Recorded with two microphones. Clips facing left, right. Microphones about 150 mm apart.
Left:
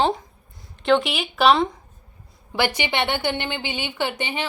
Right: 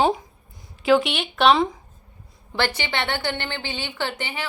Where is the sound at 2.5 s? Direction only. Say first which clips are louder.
Left 2 dB; 15° left (ahead or behind).